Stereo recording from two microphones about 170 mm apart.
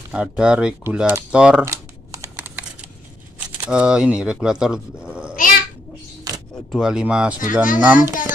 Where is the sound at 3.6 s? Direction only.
5° right (ahead or behind).